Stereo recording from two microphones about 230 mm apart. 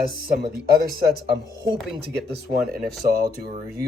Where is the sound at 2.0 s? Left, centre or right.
Right.